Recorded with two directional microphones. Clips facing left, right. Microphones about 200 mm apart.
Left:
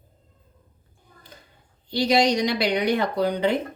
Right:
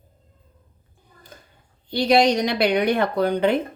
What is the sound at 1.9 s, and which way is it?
A woman's voice, 55° right (ahead or behind).